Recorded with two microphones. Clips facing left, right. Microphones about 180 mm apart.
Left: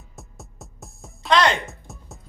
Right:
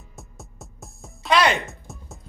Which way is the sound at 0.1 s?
Centre (ahead or behind).